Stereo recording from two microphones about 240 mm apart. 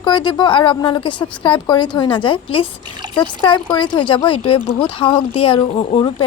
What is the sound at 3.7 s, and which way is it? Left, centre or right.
A woman's voice, centre.